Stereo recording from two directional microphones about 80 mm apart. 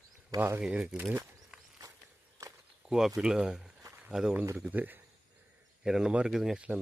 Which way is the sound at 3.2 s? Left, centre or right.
Centre.